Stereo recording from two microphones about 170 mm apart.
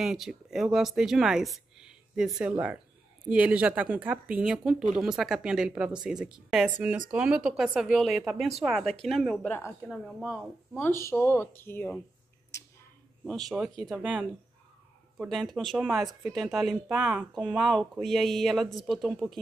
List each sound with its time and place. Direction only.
0.0 s speech: 5° right (ahead or behind); by 9.8 s 15° left (ahead or behind)
9.8 s speech: 5° right (ahead or behind)
10.8 s speech: 15° left (ahead or behind)
12.5 s a sound: 15° left (ahead or behind)
13.2 s speech: centre (ahead or behind)